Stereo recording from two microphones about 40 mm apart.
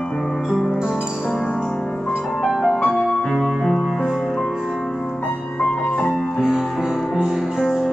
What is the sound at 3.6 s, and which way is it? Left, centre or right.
Music, centre.